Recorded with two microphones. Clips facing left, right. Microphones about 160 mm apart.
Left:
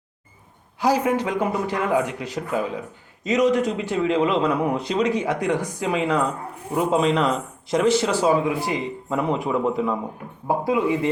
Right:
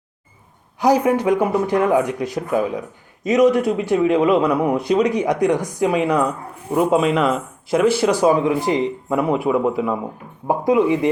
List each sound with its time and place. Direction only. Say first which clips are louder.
0.8 s speech: right 4 dB; 15° right (ahead or behind)
10.4 s speech: right 5 dB; 15° right (ahead or behind)